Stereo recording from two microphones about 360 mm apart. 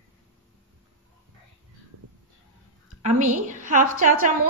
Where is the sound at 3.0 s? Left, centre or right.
Centre.